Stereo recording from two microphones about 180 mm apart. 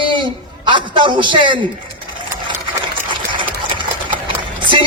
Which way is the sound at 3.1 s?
25° right (ahead or behind).